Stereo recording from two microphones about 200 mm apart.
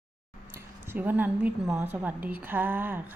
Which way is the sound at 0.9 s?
10° right (ahead or behind).